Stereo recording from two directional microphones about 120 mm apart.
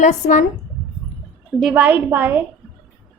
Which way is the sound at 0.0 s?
80° left.